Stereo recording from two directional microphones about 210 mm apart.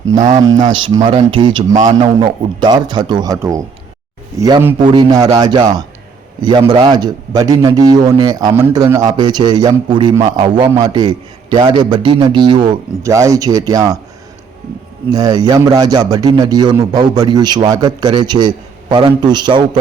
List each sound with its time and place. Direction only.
0.1 s a man's voice: 35° right (ahead or behind)
2.1 s a man's voice: 20° right (ahead or behind)
15.1 s a man's voice: 20° right (ahead or behind)